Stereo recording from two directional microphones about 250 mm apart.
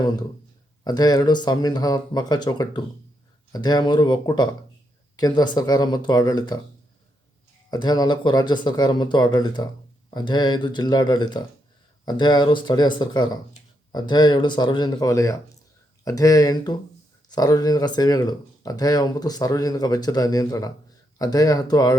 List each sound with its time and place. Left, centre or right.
0.9 s speech: centre
7.7 s speech: centre